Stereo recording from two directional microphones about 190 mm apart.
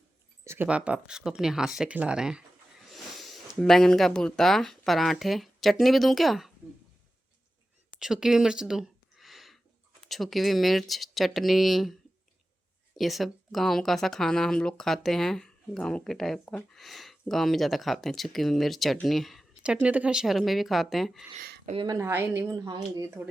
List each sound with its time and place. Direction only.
0.4 s speech: 10° right (ahead or behind)
7.9 s a sound: 5° right (ahead or behind)
10.1 s speech: centre (ahead or behind)
13.0 s speech: centre (ahead or behind)
21.7 s speech: 25° right (ahead or behind)